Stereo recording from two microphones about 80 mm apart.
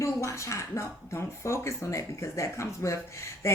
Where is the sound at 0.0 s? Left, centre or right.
Left.